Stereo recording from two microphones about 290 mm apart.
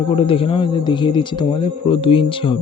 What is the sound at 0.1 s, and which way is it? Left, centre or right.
Speech, centre.